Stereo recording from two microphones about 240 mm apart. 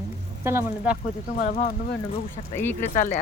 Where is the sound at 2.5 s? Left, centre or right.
Centre.